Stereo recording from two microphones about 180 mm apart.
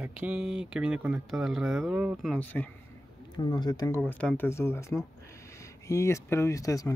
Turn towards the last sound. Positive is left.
turn(degrees=20)  # may be behind; listen again after turning